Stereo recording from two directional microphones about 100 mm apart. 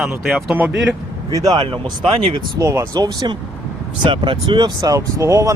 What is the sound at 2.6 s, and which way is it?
Speech, 30° right (ahead or behind).